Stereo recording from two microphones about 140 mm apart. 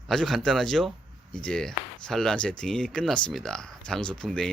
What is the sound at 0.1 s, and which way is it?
Speech, 5° left (ahead or behind).